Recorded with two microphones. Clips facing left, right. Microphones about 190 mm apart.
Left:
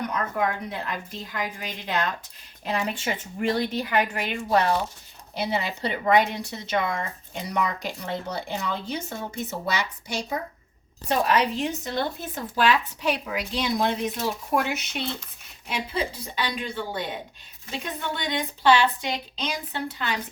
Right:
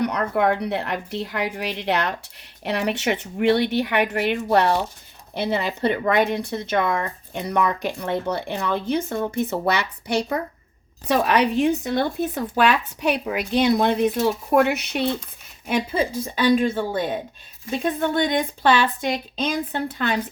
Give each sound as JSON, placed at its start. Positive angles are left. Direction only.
{"t": 0.0, "sound": "a woman's voice", "side_deg": -70}